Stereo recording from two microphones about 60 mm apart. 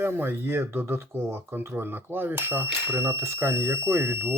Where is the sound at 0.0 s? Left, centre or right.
Right.